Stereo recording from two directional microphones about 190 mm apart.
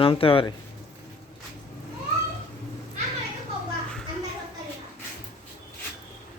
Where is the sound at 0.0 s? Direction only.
30° left (ahead or behind).